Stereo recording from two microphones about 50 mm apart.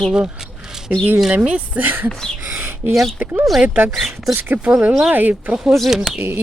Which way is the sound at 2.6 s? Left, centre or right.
Right.